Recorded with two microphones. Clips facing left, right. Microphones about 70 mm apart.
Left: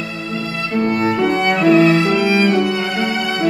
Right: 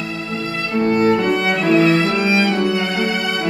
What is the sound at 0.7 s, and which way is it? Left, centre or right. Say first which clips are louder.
Music: right 2 dB; centre.